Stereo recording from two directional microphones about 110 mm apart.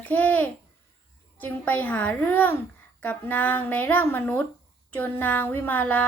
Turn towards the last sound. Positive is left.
turn(degrees=15)  # may be behind; listen again after turning